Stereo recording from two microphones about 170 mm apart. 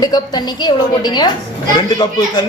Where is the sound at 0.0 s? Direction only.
25° left (ahead or behind).